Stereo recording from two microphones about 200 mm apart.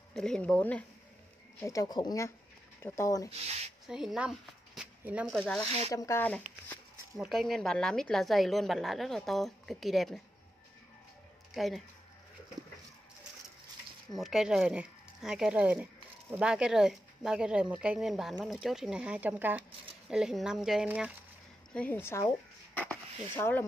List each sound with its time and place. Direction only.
0.1 s speech: 5° left (ahead or behind)
3.8 s speech: centre (ahead or behind)
5.9 s speech: 15° left (ahead or behind)
11.5 s speech: centre (ahead or behind)
14.1 s speech: centre (ahead or behind)
21.7 s speech: 10° left (ahead or behind)